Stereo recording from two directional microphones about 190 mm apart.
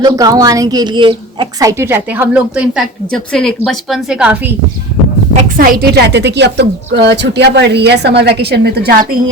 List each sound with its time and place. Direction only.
0.0 s a woman's voice: 20° right (ahead or behind)
5.3 s a woman's voice: 45° right (ahead or behind)